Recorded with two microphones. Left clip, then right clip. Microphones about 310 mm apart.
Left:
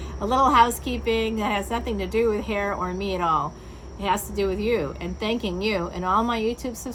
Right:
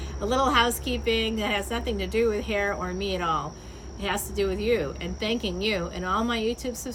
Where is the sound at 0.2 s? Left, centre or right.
Centre.